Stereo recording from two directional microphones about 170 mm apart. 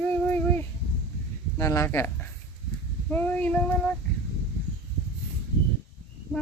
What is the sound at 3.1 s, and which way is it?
Child singing, 10° left (ahead or behind).